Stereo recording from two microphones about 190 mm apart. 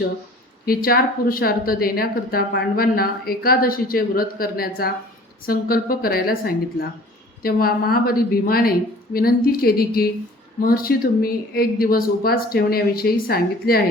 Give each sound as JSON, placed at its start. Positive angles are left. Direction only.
{"t": 0.6, "sound": "a woman's voice", "side_deg": 50}